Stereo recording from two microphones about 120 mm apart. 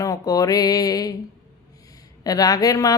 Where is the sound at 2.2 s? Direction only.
30° left (ahead or behind).